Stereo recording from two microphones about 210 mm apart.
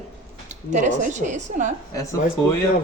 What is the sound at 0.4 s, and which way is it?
A woman's voice, 35° right (ahead or behind).